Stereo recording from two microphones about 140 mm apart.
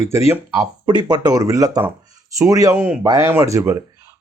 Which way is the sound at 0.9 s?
30° right (ahead or behind).